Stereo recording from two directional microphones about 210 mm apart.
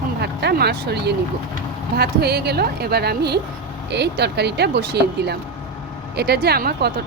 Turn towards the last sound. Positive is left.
turn(degrees=-50)  # may be behind; listen again after turning